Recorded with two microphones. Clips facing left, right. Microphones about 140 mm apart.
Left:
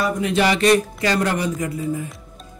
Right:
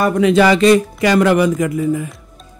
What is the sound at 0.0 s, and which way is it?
Speech, 65° right (ahead or behind).